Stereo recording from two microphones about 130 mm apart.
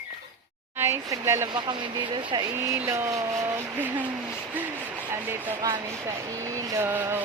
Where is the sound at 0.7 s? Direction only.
20° right (ahead or behind).